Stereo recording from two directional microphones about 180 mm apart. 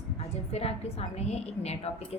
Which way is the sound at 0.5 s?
35° left (ahead or behind).